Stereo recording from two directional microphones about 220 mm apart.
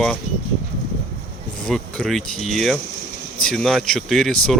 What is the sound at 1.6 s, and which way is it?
Speech, 5° left (ahead or behind).